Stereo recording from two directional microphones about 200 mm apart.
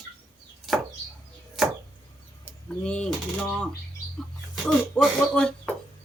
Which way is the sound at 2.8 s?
5° left (ahead or behind).